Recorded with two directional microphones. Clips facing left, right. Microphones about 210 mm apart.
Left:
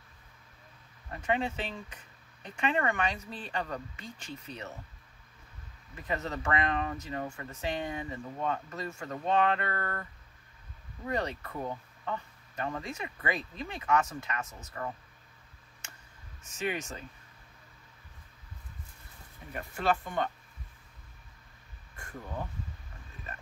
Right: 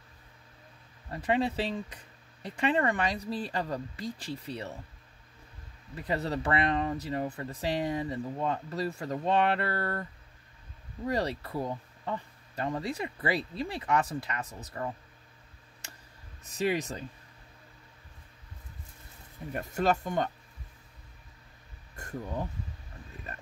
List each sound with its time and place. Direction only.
1.1 s speech: 35° right (ahead or behind)
6.0 s speech: 35° right (ahead or behind)
11.1 s speech: 35° right (ahead or behind)
16.4 s speech: 35° right (ahead or behind)
19.5 s speech: 40° right (ahead or behind)